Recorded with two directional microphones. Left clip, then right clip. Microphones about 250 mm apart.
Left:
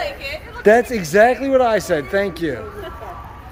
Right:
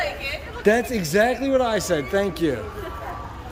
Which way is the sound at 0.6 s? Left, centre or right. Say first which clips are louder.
Left 6 dB; centre.